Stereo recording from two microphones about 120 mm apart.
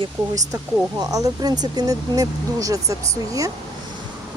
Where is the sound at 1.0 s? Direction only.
30° right (ahead or behind).